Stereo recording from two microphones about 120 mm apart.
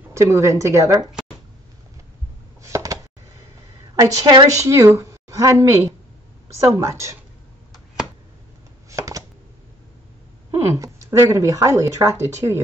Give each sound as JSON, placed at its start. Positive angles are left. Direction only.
{"t": 0.1, "sound": "a woman's voice", "side_deg": -25}
{"t": 2.6, "sound": "a sound", "side_deg": -25}
{"t": 4.0, "sound": "a woman's voice", "side_deg": -35}
{"t": 7.7, "sound": "a sound", "side_deg": -5}
{"t": 8.9, "sound": "chopping", "side_deg": -30}
{"t": 10.5, "sound": "a woman's voice", "side_deg": -25}